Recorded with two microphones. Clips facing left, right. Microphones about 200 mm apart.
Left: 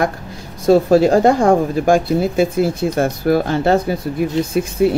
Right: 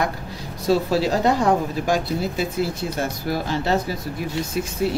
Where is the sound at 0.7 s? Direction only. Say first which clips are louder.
Left 8 dB; 50° left (ahead or behind).